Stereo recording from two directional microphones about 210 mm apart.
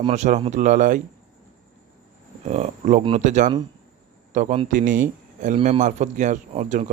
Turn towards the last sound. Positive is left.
turn(degrees=-35)  # may be behind; listen again after turning